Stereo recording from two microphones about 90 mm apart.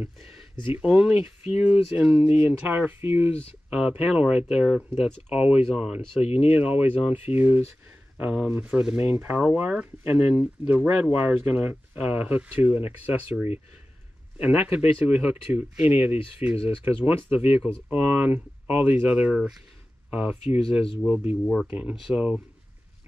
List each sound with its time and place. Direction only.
0.7 s speech: 15° right (ahead or behind)
3.7 s speech: 10° right (ahead or behind)
20.4 s speech: 90° left
21.1 s speech: 20° right (ahead or behind)